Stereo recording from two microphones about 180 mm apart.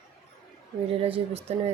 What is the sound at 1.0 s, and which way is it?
Speech, 35° right (ahead or behind).